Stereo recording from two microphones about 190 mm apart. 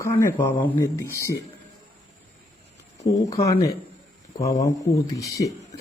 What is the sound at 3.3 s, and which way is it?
Speech, 15° left (ahead or behind).